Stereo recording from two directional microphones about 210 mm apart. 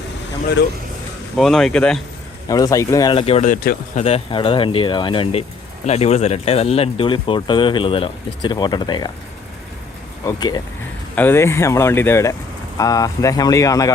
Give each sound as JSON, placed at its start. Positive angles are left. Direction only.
{"t": 1.4, "sound": "speech", "side_deg": 0}
{"t": 2.5, "sound": "speech", "side_deg": 15}
{"t": 4.0, "sound": "speech", "side_deg": 25}
{"t": 10.2, "sound": "speech", "side_deg": 20}
{"t": 11.1, "sound": "speech", "side_deg": 10}